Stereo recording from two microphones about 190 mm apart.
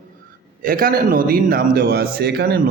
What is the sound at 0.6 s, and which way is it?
A man's voice, 50° right (ahead or behind).